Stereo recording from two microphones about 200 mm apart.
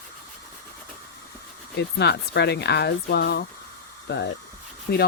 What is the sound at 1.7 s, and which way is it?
Speech, 55° left (ahead or behind).